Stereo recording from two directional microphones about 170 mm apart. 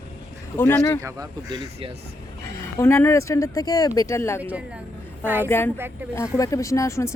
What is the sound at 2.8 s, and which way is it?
Speech, 15° left (ahead or behind).